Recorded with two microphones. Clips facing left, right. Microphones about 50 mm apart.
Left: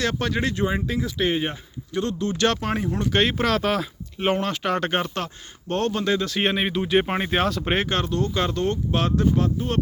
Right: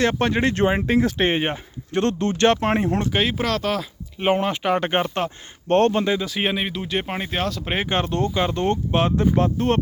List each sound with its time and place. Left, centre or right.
0.0 s speech: right
0.7 s speech: right
2.4 s speech: right
3.1 s speech: centre
4.4 s speech: centre
5.6 s speech: right
6.1 s speech: centre
8.0 s speech: right
8.3 s speech: centre
8.5 s speech: right
9.6 s speech: right